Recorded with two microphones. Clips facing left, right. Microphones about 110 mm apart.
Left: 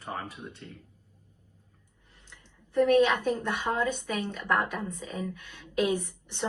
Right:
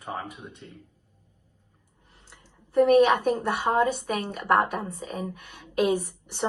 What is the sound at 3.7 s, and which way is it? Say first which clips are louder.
Speech: right 7 dB; 20° right (ahead or behind).